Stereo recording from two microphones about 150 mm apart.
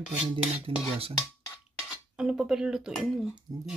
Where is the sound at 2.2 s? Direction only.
5° right (ahead or behind).